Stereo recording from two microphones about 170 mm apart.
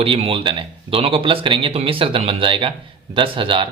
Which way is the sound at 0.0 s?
35° right (ahead or behind).